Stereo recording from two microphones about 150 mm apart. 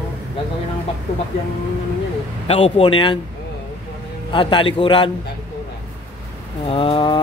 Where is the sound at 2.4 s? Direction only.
40° left (ahead or behind).